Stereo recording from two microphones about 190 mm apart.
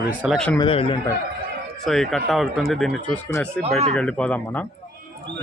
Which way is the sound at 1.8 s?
Centre (ahead or behind).